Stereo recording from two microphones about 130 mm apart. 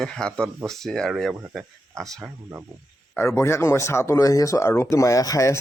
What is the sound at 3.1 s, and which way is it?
Speech, 20° left (ahead or behind).